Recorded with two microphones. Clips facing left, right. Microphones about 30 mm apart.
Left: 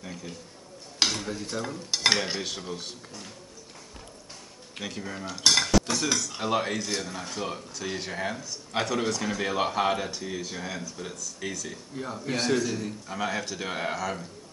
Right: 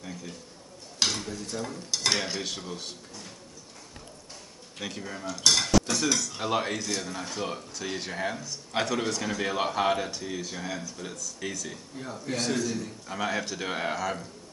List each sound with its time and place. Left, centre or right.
0.0 s stir: centre
2.4 s speech: centre
4.7 s speech: centre
5.3 s speech: centre
12.1 s stir: centre
13.1 s speech: centre